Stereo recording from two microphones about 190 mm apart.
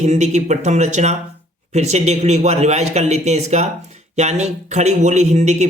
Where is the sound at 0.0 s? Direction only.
35° right (ahead or behind).